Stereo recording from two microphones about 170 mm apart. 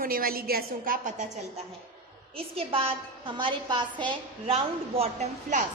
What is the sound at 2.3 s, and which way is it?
A woman's voice, 35° right (ahead or behind).